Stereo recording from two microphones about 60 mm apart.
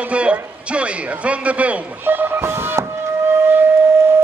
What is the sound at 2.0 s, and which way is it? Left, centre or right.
Speech, right.